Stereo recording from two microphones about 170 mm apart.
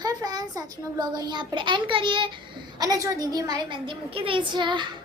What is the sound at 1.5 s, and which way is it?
A child's voice, 30° right (ahead or behind).